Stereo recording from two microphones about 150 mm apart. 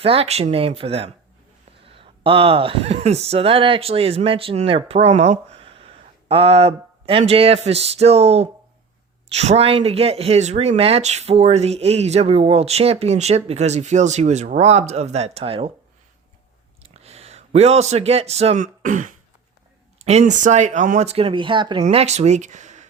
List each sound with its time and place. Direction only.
0.0 s speech: 40° right (ahead or behind)
16.8 s speech: 45° right (ahead or behind); by 19.1 s 60° right (ahead or behind)
20.0 s speech: 50° right (ahead or behind); by 21.8 s 30° right (ahead or behind)
21.8 s speech: 45° right (ahead or behind)